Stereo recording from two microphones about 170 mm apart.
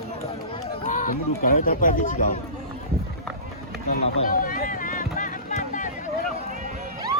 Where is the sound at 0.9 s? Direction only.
50° left (ahead or behind).